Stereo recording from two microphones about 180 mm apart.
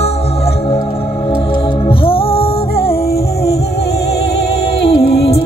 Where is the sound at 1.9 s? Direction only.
30° left (ahead or behind).